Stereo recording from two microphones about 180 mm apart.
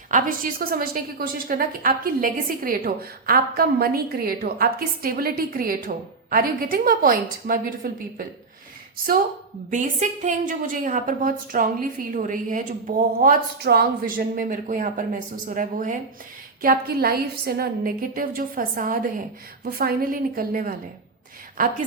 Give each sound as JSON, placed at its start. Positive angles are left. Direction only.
{"t": 0.1, "sound": "a woman's voice", "side_deg": -50}
{"t": 9.6, "sound": "a woman's voice", "side_deg": -45}
{"t": 13.1, "sound": "a woman's voice", "side_deg": -55}